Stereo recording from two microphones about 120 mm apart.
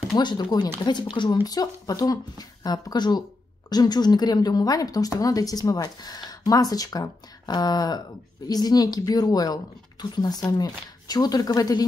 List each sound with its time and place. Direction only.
0.2 s a woman's voice: 40° left (ahead or behind)